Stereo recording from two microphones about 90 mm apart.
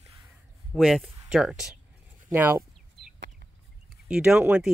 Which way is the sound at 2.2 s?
25° right (ahead or behind).